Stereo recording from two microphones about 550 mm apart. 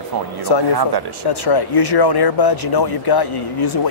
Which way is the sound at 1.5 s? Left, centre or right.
Left.